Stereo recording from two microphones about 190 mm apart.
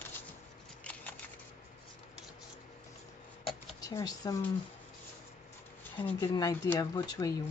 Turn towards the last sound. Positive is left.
turn(degrees=20)  # may be behind; listen again after turning